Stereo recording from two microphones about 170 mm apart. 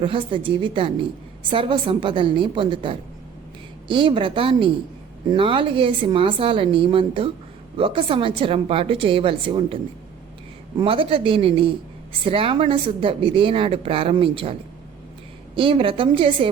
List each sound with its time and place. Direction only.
0.0 s a woman's voice: 30° right (ahead or behind)
15.5 s speech: 30° right (ahead or behind)